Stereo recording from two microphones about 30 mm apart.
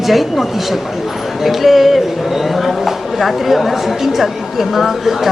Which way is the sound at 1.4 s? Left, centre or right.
Centre.